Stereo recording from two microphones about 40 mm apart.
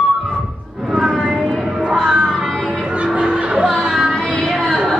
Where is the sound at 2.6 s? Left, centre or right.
Centre.